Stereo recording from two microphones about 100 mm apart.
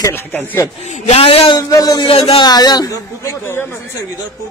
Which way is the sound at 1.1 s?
75° left (ahead or behind).